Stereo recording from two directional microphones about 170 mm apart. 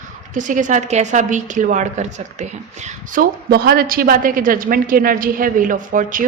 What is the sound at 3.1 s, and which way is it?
A woman's voice, 60° right (ahead or behind).